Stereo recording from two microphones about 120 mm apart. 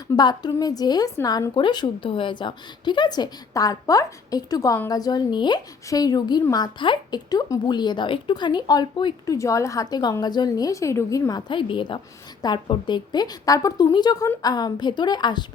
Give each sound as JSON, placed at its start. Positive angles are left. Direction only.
{"t": 0.2, "sound": "a woman's voice", "side_deg": 35}